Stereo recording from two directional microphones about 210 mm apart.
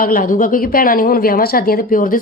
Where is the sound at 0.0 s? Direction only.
40° left (ahead or behind).